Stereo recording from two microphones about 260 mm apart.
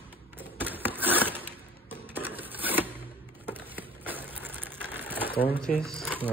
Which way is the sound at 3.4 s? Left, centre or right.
Centre.